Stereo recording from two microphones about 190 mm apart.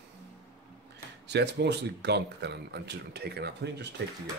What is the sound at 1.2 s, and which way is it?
Speech, 60° right (ahead or behind).